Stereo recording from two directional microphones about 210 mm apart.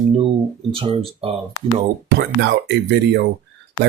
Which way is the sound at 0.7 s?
25° right (ahead or behind).